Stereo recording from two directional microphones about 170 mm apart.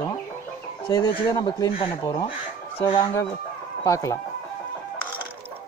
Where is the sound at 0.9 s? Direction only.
25° left (ahead or behind).